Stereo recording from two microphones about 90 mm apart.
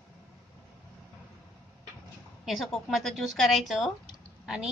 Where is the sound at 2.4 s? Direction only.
5° right (ahead or behind).